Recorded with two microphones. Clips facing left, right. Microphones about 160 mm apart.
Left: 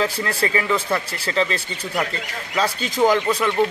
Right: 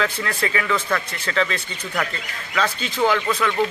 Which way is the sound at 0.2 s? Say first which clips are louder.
Left 2 dB; 35° left (ahead or behind).